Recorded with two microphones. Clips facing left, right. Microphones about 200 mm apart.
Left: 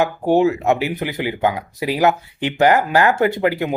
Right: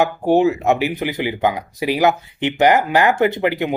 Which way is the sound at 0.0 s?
20° right (ahead or behind).